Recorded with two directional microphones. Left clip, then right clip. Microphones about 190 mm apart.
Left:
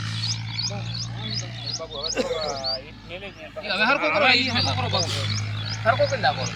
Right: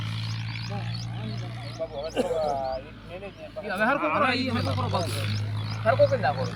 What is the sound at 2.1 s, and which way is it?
Speech, 25° right (ahead or behind).